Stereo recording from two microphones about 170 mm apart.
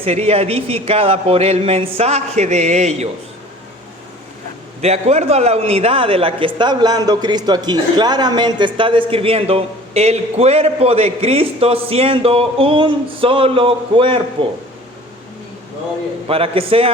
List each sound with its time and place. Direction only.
0.0 s a man's voice: 35° right (ahead or behind)
4.8 s a man's voice: 40° right (ahead or behind)
16.3 s a man's voice: 35° right (ahead or behind)